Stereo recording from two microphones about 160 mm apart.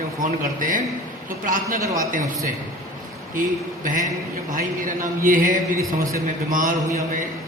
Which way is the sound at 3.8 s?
55° right (ahead or behind).